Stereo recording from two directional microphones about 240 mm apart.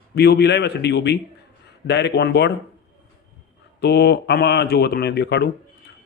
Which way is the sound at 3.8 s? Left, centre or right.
Left.